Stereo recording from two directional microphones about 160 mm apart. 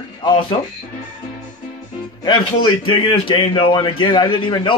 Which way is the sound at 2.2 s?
30° left (ahead or behind).